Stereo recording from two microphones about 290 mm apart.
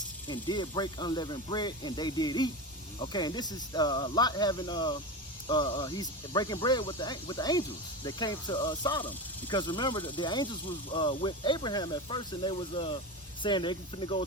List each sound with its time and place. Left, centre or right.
0.3 s speech: centre